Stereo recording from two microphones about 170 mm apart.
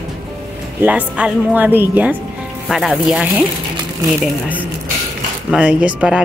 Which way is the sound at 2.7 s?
Centre (ahead or behind).